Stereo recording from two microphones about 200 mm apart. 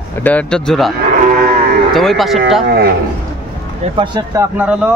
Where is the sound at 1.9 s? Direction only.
Centre (ahead or behind).